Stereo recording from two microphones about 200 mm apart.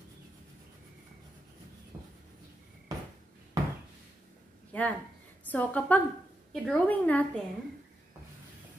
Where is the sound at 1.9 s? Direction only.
20° right (ahead or behind).